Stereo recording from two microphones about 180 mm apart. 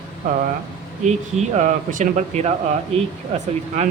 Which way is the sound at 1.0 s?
40° right (ahead or behind).